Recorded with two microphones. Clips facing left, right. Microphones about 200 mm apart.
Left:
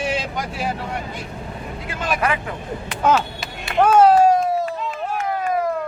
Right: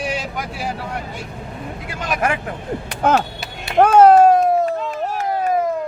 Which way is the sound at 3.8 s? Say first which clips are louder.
Right 3 dB; 55° right (ahead or behind).